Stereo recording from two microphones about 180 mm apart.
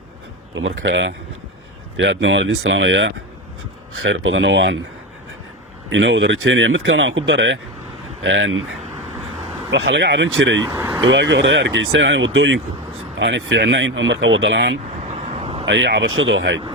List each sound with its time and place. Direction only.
0.5 s speech: 90° right
5.9 s speech: 90° right
9.6 s speech: 85° right
10.7 s speech: 15° right (ahead or behind)
11.1 s speech: 80° right
15.1 s vehicle: 35° right (ahead or behind)
15.6 s speech: 75° right (ahead or behind)